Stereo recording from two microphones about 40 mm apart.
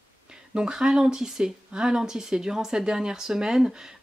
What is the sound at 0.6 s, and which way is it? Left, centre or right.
Speech, centre.